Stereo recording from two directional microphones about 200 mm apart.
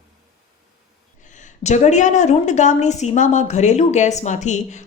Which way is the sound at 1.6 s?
35° left (ahead or behind).